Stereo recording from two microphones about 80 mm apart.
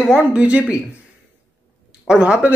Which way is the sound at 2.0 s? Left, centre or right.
Centre.